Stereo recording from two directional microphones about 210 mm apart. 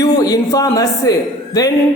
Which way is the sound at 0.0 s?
15° left (ahead or behind).